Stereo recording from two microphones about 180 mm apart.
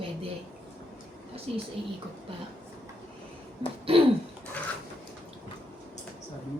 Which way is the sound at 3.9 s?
30° right (ahead or behind).